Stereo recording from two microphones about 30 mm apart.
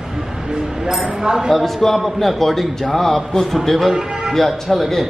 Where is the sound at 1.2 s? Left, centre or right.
Right.